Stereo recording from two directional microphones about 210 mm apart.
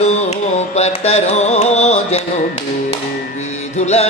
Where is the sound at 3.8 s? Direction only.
30° left (ahead or behind).